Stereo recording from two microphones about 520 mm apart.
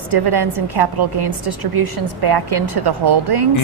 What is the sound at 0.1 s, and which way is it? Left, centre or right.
A woman's voice, right.